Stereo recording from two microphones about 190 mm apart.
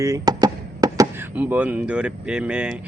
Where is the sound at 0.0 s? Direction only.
20° right (ahead or behind).